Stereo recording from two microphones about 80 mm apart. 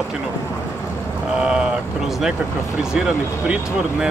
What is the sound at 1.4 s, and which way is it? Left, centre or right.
Speech, centre.